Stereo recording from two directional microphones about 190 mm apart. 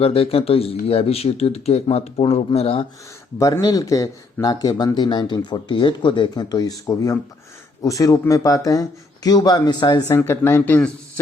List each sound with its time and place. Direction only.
0.0 s speech: 30° left (ahead or behind)
3.3 s speech: 15° left (ahead or behind)